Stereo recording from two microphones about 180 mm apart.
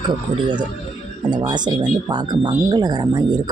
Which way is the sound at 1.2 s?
25° right (ahead or behind).